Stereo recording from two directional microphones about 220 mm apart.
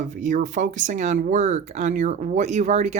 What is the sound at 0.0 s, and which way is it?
Speech, 35° right (ahead or behind).